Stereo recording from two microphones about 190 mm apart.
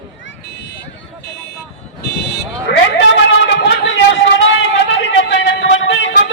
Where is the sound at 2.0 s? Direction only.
60° left (ahead or behind).